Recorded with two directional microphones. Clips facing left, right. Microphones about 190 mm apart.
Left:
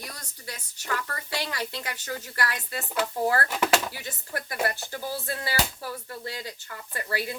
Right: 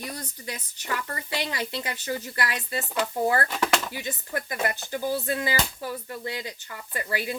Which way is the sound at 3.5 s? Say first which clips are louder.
Left 1 dB; 10° left (ahead or behind).